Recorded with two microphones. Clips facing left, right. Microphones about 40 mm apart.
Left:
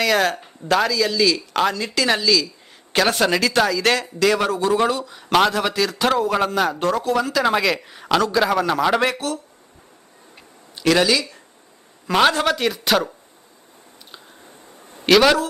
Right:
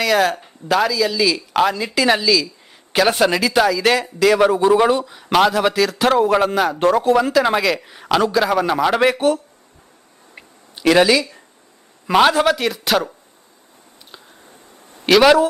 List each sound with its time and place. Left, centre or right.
0.0 s speech: centre
4.4 s speech: centre
5.1 s speech: centre
6.1 s speech: centre
6.5 s speech: centre
6.7 s speech: right
7.3 s speech: centre
9.1 s speech: right
10.8 s speech: centre
14.9 s a man's voice: centre